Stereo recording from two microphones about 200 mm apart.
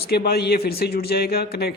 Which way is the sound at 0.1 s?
50° left (ahead or behind).